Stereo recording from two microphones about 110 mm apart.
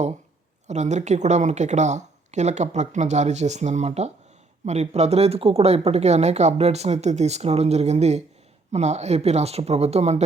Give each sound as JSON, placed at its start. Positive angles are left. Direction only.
{"t": 0.7, "sound": "speech", "side_deg": -90}